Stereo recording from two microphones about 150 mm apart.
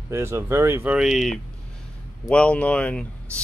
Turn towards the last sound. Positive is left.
turn(degrees=10)  # may be behind; listen again after turning